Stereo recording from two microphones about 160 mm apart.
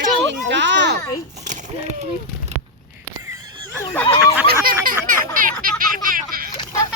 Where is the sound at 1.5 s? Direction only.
50° right (ahead or behind).